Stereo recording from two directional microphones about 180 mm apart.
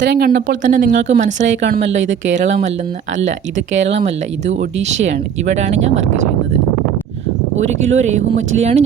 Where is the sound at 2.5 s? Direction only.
35° right (ahead or behind).